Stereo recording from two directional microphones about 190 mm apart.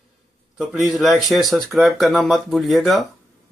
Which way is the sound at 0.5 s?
Centre (ahead or behind).